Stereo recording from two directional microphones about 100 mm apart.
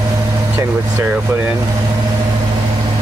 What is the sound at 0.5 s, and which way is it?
Vehicle, 20° right (ahead or behind).